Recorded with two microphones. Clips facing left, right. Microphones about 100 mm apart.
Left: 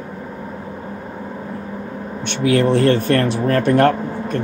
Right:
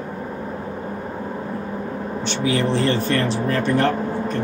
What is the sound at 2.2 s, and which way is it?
Speech, 55° left (ahead or behind).